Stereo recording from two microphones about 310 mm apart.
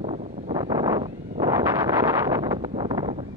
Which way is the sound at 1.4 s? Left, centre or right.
Centre.